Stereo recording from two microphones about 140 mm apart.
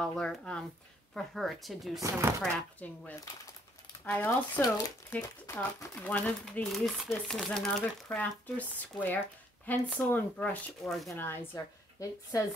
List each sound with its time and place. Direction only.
0.0 s speech: 5° left (ahead or behind)
2.0 s speech: 25° right (ahead or behind)
2.4 s a woman's voice: 5° left (ahead or behind)
4.6 s speech: 25° left (ahead or behind)
5.1 s a woman's voice: 10° left (ahead or behind)
11.1 s a woman's voice: 15° left (ahead or behind)